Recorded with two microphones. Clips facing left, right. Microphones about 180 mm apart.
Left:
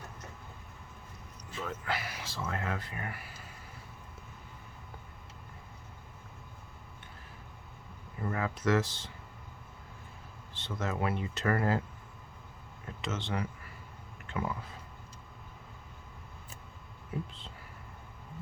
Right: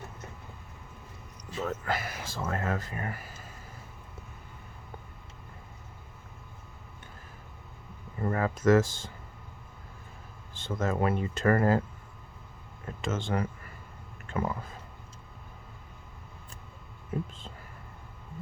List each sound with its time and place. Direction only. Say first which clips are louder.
1.6 s speech: right 4 dB; 45° right (ahead or behind)
8.2 s speech: right 5 dB; 45° right (ahead or behind)
10.6 s speech: right 5 dB; 50° right (ahead or behind)
13.0 s speech: right 5 dB; 50° right (ahead or behind)
17.1 s speech: right 4 dB; 45° right (ahead or behind)